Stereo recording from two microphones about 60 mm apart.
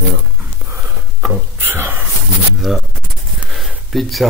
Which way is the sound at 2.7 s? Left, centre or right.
Centre.